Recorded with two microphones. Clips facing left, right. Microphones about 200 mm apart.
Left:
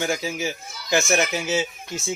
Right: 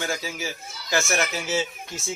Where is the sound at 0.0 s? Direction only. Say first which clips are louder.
Left 4 dB; 20° left (ahead or behind).